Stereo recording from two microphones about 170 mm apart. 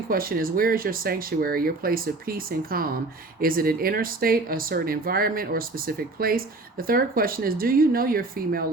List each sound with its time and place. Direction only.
0.1 s speech: 60° right (ahead or behind)